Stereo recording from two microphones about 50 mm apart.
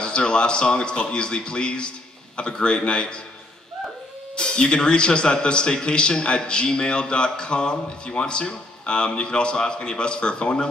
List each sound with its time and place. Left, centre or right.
0.0 s a man's voice: centre
4.4 s a man's voice: centre